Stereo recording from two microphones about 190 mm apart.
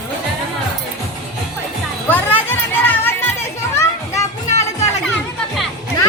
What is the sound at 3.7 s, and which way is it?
Children playing, 15° left (ahead or behind).